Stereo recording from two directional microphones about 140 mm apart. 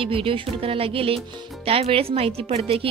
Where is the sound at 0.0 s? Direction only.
40° right (ahead or behind).